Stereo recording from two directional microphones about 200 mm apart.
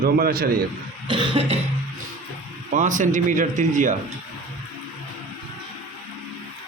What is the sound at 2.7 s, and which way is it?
Speech, 40° right (ahead or behind).